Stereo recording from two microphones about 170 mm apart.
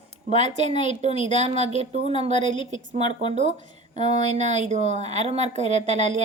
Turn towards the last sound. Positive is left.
turn(degrees=-45)  # may be behind; listen again after turning